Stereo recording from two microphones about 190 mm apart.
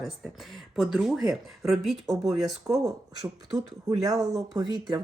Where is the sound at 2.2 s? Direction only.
20° right (ahead or behind).